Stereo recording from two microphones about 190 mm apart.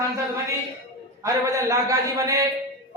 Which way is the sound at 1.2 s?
15° right (ahead or behind).